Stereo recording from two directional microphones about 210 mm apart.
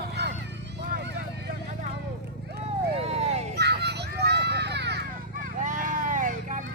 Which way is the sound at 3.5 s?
55° right (ahead or behind).